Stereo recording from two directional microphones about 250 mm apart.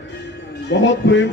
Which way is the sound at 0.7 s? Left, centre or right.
Left.